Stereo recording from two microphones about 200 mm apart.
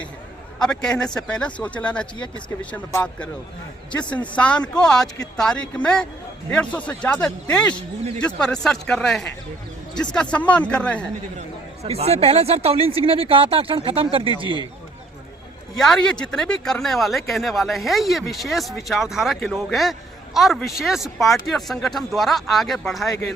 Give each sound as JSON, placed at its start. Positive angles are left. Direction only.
{"t": 0.6, "sound": "speech", "side_deg": 5}
{"t": 4.4, "sound": "speech", "side_deg": 5}
{"t": 11.3, "sound": "speech", "side_deg": -30}
{"t": 15.8, "sound": "speech", "side_deg": 5}